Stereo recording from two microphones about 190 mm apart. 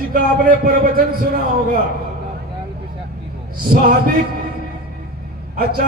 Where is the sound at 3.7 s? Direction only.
50° right (ahead or behind).